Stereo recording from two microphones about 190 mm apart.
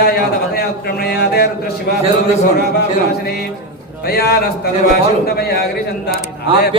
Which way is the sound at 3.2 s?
55° left (ahead or behind).